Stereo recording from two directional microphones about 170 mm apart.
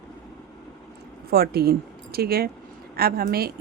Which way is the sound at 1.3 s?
65° right (ahead or behind).